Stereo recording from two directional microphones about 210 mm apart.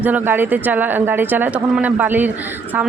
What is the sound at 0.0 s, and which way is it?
A man's voice, 10° right (ahead or behind).